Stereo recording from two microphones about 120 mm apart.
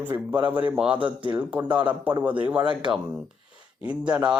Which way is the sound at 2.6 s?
40° right (ahead or behind).